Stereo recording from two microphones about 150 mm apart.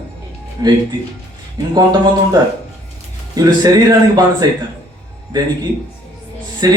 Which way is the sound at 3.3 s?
25° right (ahead or behind).